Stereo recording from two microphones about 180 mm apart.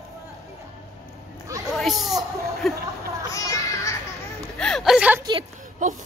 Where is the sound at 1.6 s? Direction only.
Centre (ahead or behind).